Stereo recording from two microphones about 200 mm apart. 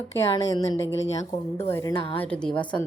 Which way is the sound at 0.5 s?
25° left (ahead or behind).